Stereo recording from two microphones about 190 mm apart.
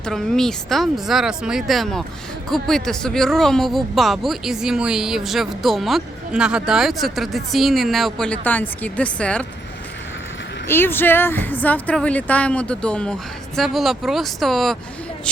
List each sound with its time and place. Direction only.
0.0 s speech: 5° left (ahead or behind)
10.7 s a woman's voice: 10° left (ahead or behind)